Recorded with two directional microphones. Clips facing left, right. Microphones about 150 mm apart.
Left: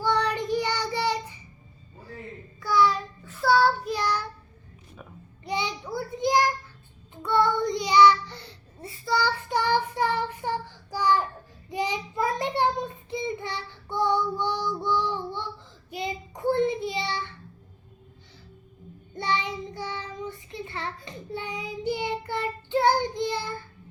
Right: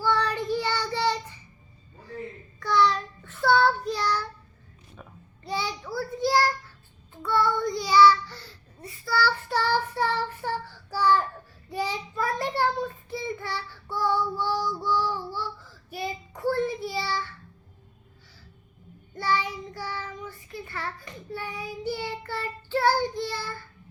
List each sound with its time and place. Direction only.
0.0 s child singing: 15° left (ahead or behind)
2.6 s child singing: 5° left (ahead or behind)
3.9 s child singing: 15° left (ahead or behind)
5.5 s child singing: 20° left (ahead or behind)
19.1 s child singing: 20° left (ahead or behind)